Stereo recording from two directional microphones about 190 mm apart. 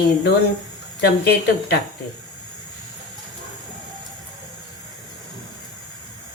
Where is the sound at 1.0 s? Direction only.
60° left (ahead or behind).